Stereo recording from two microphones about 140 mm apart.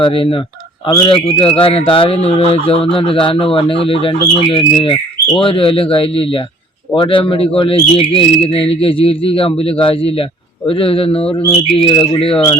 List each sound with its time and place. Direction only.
0.0 s speech: 40° left (ahead or behind)